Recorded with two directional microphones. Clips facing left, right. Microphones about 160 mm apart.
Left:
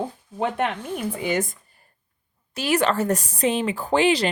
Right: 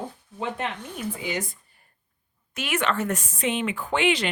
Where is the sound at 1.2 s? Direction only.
50° left (ahead or behind).